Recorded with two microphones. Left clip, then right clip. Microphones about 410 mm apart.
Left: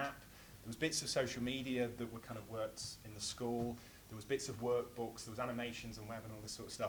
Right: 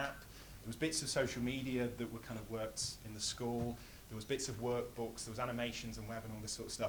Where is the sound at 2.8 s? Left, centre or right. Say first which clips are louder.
Right 4 dB; right.